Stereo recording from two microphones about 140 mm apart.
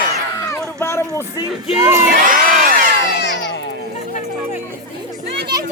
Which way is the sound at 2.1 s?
75° right (ahead or behind).